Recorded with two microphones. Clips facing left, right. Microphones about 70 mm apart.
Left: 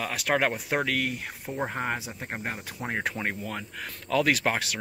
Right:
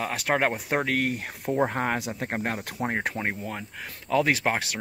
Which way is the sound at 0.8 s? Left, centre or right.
Right.